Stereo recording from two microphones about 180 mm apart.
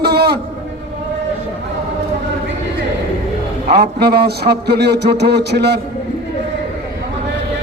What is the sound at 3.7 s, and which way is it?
A man's voice, 65° right (ahead or behind).